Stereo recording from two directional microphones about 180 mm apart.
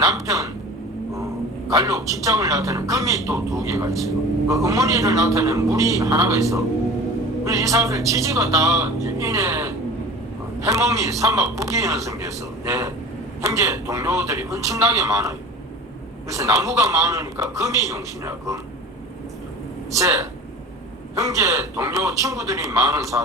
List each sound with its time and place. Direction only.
0.0 s a sound: 20° right (ahead or behind)
1.7 s a man's voice: 20° right (ahead or behind)
19.9 s a man's voice: 15° right (ahead or behind)